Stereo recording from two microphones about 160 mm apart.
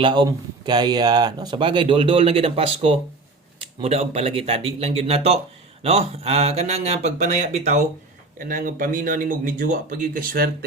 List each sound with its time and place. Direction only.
0.0 s speech: 30° right (ahead or behind); by 7.8 s 45° right (ahead or behind)
8.4 s speech: 60° right (ahead or behind)